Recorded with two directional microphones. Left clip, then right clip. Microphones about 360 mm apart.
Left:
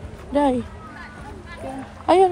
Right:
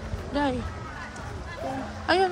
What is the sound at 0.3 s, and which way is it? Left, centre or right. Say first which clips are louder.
Speech: left 8 dB; centre.